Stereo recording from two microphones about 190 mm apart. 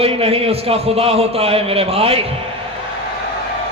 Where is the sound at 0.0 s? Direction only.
30° right (ahead or behind).